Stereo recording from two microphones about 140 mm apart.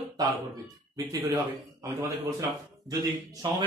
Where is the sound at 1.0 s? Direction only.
25° right (ahead or behind).